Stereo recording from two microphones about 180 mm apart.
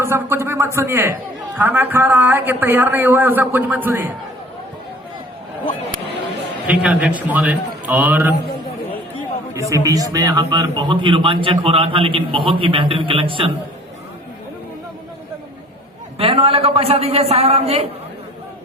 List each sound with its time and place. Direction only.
0.0 s a man's voice: 15° right (ahead or behind)
6.7 s a man's voice: 5° right (ahead or behind)
9.6 s speech: 15° right (ahead or behind)
16.1 s a man's voice: 30° right (ahead or behind)